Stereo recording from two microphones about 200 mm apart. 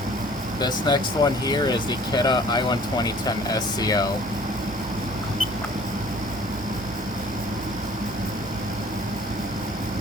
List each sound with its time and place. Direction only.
0.6 s speech: 20° left (ahead or behind)